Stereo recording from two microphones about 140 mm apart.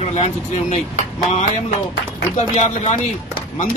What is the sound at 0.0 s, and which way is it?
Speech, 55° left (ahead or behind).